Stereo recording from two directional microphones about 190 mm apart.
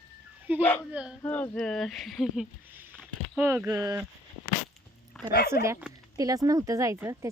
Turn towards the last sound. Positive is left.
turn(degrees=-15)  # may be behind; listen again after turning